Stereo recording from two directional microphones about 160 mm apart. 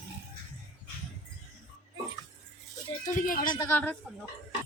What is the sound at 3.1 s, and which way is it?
Speech, 55° left (ahead or behind).